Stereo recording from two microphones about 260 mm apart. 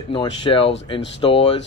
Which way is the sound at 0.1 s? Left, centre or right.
Centre.